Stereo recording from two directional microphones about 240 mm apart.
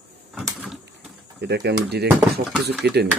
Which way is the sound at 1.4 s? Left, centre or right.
Right.